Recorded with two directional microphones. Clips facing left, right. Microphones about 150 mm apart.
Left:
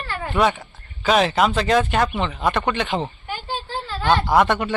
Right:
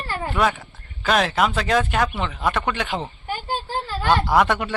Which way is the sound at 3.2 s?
45° right (ahead or behind).